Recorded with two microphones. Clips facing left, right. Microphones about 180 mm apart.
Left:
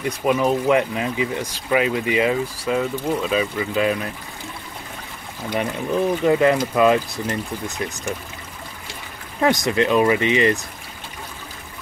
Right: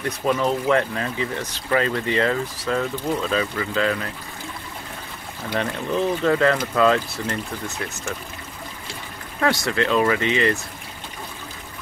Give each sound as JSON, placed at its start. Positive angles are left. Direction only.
{"t": 0.0, "sound": "speech", "side_deg": 10}
{"t": 5.5, "sound": "speech", "side_deg": 15}
{"t": 9.4, "sound": "speech", "side_deg": 20}